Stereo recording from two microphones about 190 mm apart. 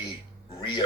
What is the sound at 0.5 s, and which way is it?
Music, 20° left (ahead or behind).